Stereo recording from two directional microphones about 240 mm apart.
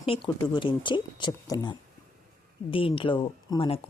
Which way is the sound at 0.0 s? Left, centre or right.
Left.